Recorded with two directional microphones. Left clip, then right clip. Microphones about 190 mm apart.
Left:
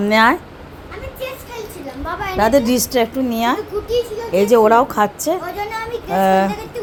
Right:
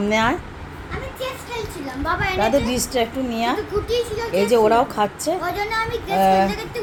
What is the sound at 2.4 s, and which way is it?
A woman's voice, 45° left (ahead or behind).